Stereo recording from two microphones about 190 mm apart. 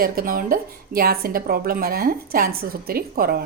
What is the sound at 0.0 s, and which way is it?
Speech, 50° right (ahead or behind).